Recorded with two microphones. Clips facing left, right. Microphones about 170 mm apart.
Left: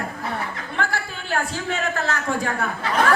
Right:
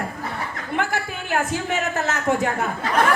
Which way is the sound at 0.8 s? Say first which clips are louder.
Right 2 dB; 20° right (ahead or behind).